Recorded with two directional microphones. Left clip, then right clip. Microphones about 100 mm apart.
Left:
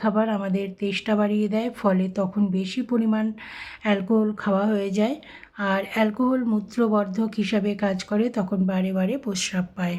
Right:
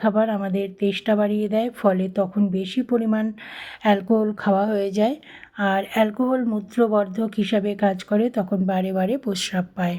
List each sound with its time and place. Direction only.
0.0 s speech: 40° right (ahead or behind)